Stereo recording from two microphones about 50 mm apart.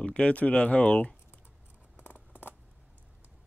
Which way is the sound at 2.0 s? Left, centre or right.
Left.